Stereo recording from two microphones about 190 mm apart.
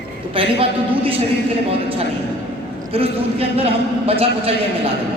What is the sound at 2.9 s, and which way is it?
A man's voice, 30° right (ahead or behind).